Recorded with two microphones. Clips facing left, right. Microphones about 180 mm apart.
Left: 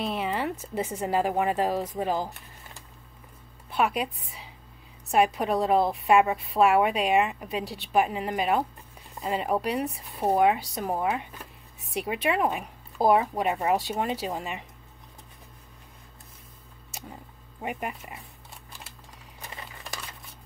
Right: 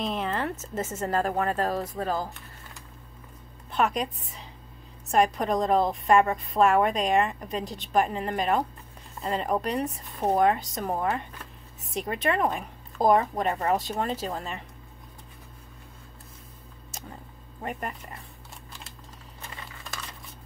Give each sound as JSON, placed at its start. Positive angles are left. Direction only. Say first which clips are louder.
{"t": 0.0, "sound": "a woman's voice", "louder": "even", "side_deg": 5}
{"t": 3.7, "sound": "a woman's voice", "louder": "even", "side_deg": 5}
{"t": 16.9, "sound": "a sound", "louder": "left 1 dB", "side_deg": 10}
{"t": 19.4, "sound": "crumpling", "louder": "left 1 dB", "side_deg": 15}